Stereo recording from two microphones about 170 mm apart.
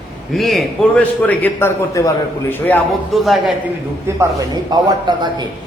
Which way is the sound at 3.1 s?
Centre (ahead or behind).